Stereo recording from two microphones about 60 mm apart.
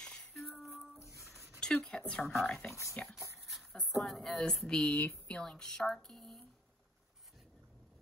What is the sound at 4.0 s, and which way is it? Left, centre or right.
Speech, centre.